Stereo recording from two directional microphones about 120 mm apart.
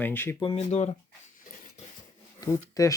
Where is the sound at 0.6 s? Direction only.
65° left (ahead or behind).